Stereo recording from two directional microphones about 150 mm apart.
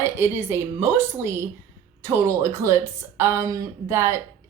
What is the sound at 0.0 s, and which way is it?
Speech, 15° right (ahead or behind).